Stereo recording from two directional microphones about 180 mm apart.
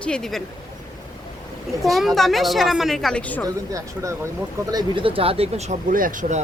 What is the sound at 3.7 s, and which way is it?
Speech, 15° right (ahead or behind).